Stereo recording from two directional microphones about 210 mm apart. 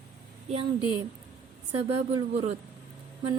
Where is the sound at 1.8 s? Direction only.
30° right (ahead or behind).